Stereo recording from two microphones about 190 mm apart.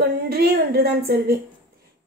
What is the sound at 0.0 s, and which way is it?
Speech, 55° right (ahead or behind).